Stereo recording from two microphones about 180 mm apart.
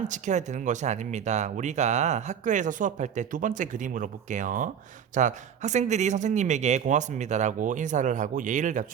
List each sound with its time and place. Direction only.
0.1 s speech: 40° right (ahead or behind)